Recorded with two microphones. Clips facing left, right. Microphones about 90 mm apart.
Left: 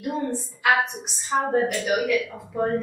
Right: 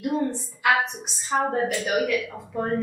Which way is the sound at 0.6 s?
Centre (ahead or behind).